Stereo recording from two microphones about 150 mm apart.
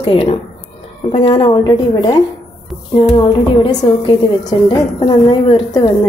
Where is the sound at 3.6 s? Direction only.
30° left (ahead or behind).